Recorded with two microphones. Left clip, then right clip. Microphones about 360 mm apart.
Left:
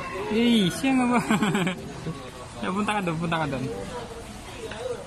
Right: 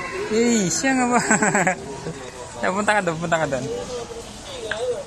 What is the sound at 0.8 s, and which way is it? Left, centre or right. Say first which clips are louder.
Speech: right 7 dB; centre.